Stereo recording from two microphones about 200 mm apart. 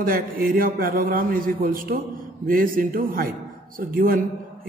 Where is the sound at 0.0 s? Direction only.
45° right (ahead or behind).